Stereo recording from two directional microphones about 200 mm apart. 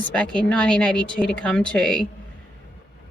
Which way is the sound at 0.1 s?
5° left (ahead or behind).